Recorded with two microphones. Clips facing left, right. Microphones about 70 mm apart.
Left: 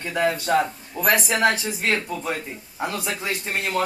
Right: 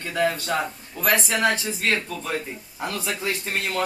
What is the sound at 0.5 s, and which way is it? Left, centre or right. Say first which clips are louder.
Speech: left 5 dB; left.